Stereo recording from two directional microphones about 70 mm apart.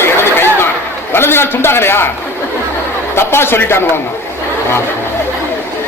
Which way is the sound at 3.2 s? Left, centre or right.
Left.